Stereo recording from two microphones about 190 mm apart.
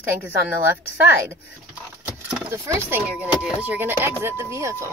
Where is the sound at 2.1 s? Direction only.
10° right (ahead or behind).